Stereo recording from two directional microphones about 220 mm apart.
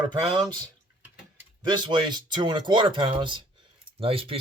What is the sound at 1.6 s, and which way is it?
Speech, 20° right (ahead or behind).